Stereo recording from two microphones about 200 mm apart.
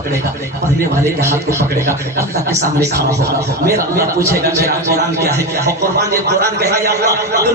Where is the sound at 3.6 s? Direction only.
15° right (ahead or behind).